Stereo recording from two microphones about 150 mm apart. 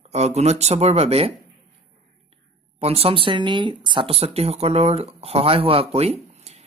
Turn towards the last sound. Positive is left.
turn(degrees=-45)  # may be behind; listen again after turning